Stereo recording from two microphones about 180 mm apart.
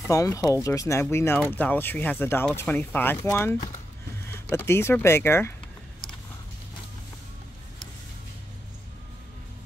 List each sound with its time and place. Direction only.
0.1 s speech: 20° left (ahead or behind)